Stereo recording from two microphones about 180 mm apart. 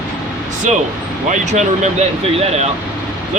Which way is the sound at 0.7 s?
40° right (ahead or behind).